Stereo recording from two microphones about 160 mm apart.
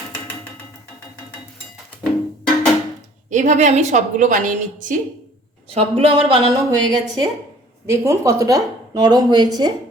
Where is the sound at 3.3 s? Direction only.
50° right (ahead or behind).